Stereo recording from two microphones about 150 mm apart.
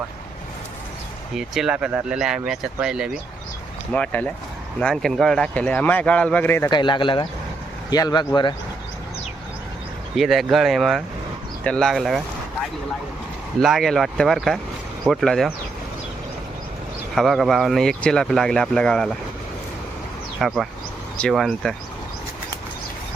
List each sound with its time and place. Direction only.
1.4 s speech: 5° right (ahead or behind)
3.9 s a man's voice: 10° left (ahead or behind)
6.7 s speech: 30° left (ahead or behind)
10.2 s speech: centre (ahead or behind)
13.6 s speech: centre (ahead or behind)
17.2 s speech: centre (ahead or behind)
20.4 s speech: centre (ahead or behind)